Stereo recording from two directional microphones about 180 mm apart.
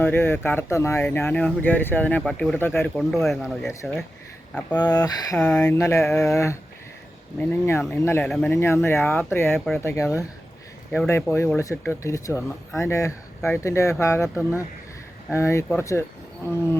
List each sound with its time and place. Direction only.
0.0 s speech: 10° left (ahead or behind)
4.8 s speech: 20° left (ahead or behind)
5.4 s speech: 5° left (ahead or behind)
15.3 s speech: 15° left (ahead or behind)